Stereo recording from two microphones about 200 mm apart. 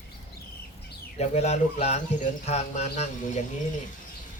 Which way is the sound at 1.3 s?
35° left (ahead or behind).